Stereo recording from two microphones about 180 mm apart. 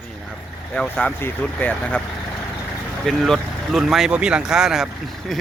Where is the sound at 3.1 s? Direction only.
Centre (ahead or behind).